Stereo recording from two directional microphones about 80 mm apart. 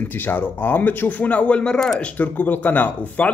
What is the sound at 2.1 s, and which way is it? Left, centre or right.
Speech, left.